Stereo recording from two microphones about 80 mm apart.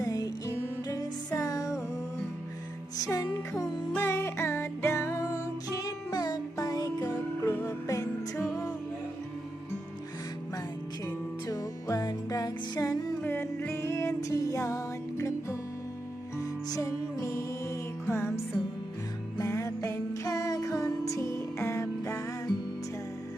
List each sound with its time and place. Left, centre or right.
0.0 s music: left
3.1 s music: left
5.8 s music: left
7.1 s music: left
7.6 s music: left
11.0 s music: left
13.2 s music: left
19.4 s music: left